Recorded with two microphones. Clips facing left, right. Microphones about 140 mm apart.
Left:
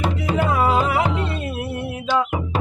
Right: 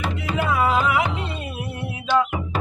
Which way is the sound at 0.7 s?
40° left (ahead or behind).